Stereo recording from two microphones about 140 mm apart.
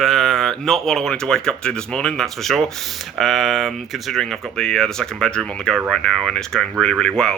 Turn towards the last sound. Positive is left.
turn(degrees=5)  # may be behind; listen again after turning